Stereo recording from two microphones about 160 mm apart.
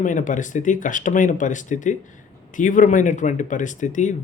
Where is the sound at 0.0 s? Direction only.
55° left (ahead or behind).